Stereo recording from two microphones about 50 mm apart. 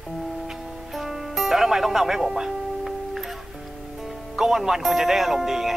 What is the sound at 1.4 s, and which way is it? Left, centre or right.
Music, centre.